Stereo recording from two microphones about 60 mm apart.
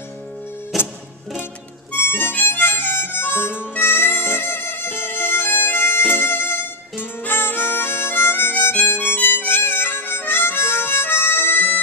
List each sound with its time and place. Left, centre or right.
0.7 s music: centre
2.0 s harmonica: left